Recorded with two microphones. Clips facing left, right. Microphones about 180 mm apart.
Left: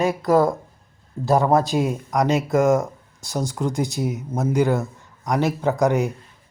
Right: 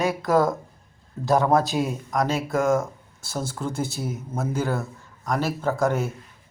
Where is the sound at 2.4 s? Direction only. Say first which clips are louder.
Left 4 dB; 20° left (ahead or behind).